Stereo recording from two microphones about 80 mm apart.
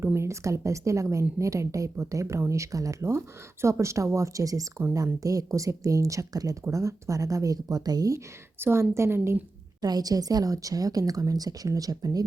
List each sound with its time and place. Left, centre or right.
0.0 s speech: right
8.5 s speech: right
9.8 s speech: right